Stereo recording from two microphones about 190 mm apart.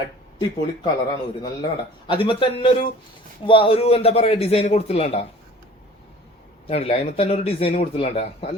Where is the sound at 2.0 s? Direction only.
25° left (ahead or behind).